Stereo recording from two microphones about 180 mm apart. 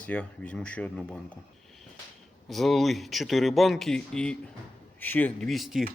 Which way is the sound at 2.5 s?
Centre (ahead or behind).